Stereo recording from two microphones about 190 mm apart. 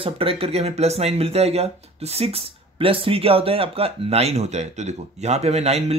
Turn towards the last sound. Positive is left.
turn(degrees=-35)  # may be behind; listen again after turning